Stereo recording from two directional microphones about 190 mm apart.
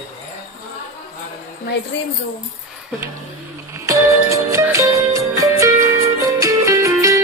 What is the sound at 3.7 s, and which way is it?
Music, 15° right (ahead or behind).